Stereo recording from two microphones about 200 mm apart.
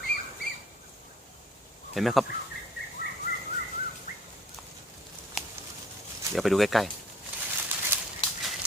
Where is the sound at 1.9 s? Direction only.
Centre (ahead or behind).